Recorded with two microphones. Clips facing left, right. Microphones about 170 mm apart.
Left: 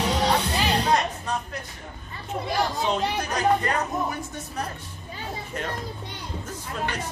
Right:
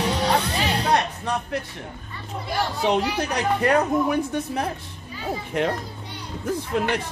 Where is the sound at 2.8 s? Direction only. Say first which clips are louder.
Right 3 dB; 65° right (ahead or behind).